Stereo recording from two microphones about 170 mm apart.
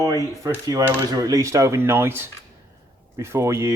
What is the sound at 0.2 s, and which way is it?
Speech, 20° right (ahead or behind).